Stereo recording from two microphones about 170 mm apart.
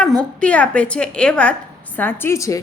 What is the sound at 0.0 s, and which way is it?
A woman's voice, 5° left (ahead or behind).